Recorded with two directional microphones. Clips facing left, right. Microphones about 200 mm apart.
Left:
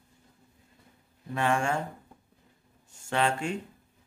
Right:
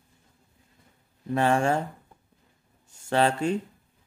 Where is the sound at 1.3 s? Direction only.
35° right (ahead or behind).